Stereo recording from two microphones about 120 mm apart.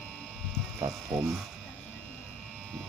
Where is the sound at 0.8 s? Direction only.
20° right (ahead or behind).